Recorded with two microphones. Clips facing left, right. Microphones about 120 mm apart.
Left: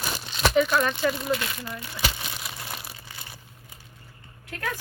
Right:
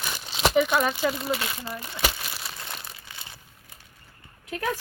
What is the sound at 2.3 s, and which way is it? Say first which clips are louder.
Crumpling: left 1 dB; centre (ahead or behind).